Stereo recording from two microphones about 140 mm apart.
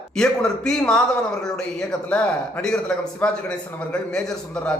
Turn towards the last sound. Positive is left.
turn(degrees=5)  # may be behind; listen again after turning